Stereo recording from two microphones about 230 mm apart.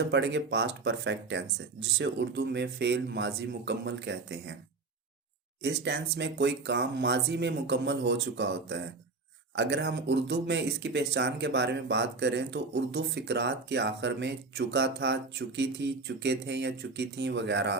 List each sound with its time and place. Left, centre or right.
0.0 s speech: right
5.6 s speech: right